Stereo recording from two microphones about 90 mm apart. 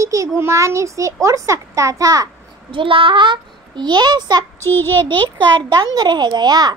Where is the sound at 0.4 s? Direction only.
30° right (ahead or behind).